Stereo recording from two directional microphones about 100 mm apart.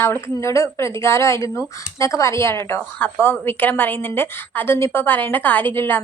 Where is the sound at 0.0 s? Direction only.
25° left (ahead or behind).